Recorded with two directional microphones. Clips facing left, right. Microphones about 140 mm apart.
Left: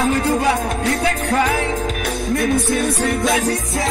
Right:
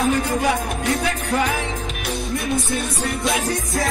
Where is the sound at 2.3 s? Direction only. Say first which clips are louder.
Left 6 dB; centre (ahead or behind).